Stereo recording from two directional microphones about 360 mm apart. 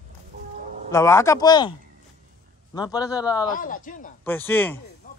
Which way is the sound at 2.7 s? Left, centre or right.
Centre.